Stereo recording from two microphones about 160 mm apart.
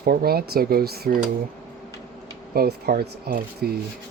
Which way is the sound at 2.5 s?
80° right.